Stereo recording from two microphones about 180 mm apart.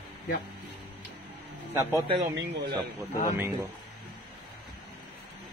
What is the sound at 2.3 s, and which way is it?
Speech, 85° right.